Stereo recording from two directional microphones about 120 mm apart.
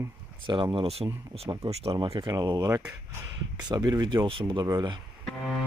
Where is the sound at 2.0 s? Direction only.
35° right (ahead or behind).